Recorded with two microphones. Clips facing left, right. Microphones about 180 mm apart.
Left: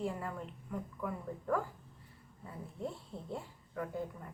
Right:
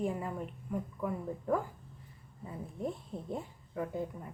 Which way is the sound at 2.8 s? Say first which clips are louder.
Right 4 dB; 15° right (ahead or behind).